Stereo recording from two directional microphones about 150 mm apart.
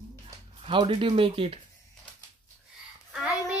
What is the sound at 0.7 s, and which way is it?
Speech, 35° right (ahead or behind).